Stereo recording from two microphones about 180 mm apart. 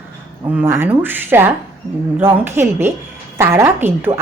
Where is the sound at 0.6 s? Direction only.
15° right (ahead or behind).